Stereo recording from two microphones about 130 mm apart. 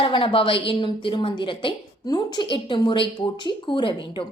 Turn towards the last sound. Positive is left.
turn(degrees=40)  # may be behind; listen again after turning